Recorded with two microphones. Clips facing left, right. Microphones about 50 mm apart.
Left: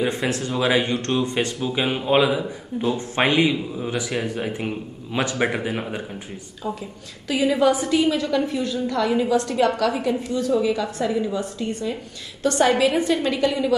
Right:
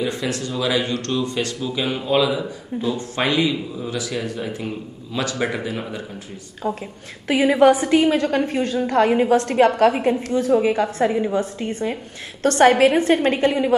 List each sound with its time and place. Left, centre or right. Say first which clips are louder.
0.0 s speech: left 1 dB; left
6.6 s a woman's voice: right 4 dB; right
12.4 s a woman's voice: right 4 dB; right